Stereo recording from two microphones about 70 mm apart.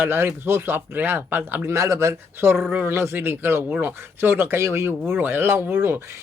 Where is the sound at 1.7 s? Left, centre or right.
Right.